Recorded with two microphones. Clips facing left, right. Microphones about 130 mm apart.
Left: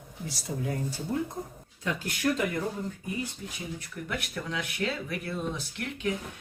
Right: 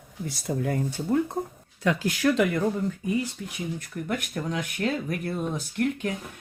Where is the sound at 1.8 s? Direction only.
90° right.